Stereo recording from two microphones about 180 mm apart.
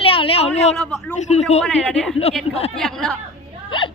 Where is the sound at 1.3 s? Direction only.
35° left (ahead or behind).